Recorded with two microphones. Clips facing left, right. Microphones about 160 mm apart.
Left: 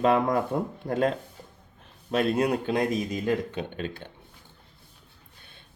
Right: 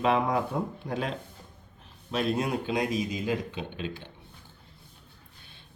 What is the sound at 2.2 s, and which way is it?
Speech, 55° left (ahead or behind).